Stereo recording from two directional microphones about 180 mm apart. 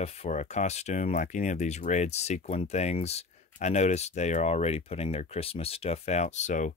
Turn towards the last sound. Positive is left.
turn(degrees=40)  # may be behind; listen again after turning